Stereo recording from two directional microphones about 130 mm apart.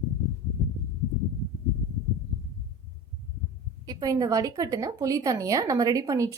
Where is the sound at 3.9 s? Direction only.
30° right (ahead or behind).